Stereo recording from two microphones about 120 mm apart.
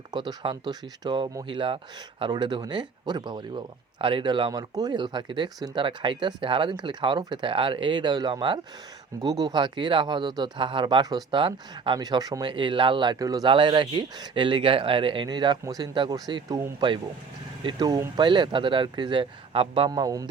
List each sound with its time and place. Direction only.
0.3 s speech: 35° right (ahead or behind)
2.3 s speech: 35° right (ahead or behind)
13.5 s speech: 45° right (ahead or behind)
19.9 s speech: 30° right (ahead or behind)